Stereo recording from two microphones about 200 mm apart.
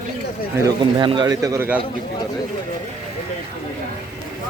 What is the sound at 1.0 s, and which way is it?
Speech, 25° right (ahead or behind).